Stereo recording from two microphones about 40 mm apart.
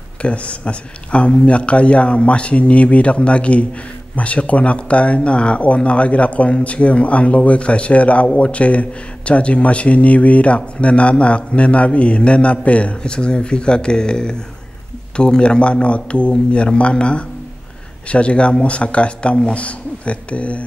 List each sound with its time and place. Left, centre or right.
0.2 s speech: left
13.0 s speech: left